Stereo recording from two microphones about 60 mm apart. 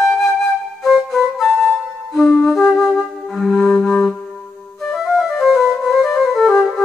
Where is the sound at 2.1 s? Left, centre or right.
Centre.